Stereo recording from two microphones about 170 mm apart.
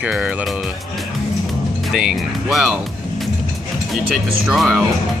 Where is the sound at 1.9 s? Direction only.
Centre (ahead or behind).